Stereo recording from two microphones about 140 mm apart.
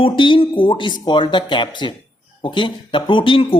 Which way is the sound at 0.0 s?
40° left (ahead or behind).